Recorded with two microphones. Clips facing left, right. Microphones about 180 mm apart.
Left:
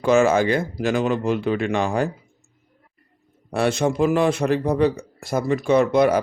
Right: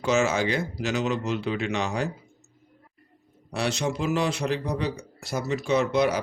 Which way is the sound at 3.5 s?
55° left (ahead or behind).